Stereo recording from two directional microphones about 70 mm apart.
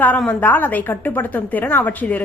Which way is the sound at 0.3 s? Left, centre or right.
Left.